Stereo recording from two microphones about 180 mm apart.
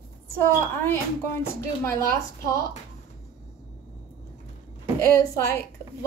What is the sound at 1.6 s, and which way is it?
A woman's voice, 15° left (ahead or behind).